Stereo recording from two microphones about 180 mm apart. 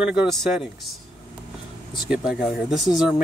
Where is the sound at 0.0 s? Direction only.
5° right (ahead or behind).